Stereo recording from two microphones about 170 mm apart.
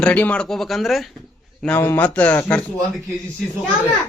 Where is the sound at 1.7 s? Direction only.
15° left (ahead or behind).